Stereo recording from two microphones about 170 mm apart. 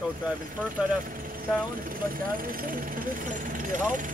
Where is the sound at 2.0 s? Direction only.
55° right (ahead or behind).